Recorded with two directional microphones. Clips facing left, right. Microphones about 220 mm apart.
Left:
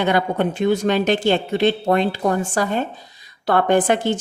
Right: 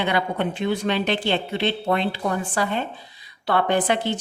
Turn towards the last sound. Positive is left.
turn(degrees=50)  # may be behind; listen again after turning